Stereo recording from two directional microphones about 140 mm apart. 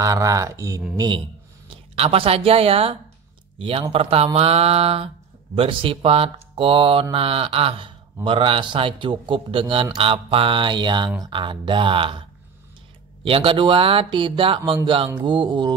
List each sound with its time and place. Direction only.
0.0 s speech: 25° right (ahead or behind)
2.0 s speech: 45° right (ahead or behind)